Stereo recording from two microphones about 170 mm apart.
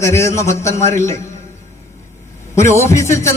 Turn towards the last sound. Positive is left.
turn(degrees=15)  # may be behind; listen again after turning